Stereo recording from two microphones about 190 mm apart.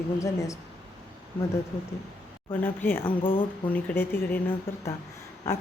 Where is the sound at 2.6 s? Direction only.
10° left (ahead or behind).